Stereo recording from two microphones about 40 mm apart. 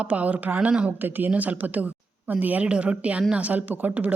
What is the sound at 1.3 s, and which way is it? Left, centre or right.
A woman's voice, right.